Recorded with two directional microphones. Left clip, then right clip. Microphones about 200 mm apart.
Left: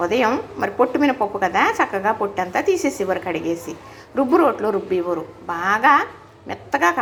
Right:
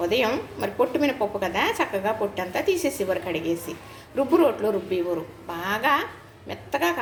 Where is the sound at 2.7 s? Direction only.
Centre (ahead or behind).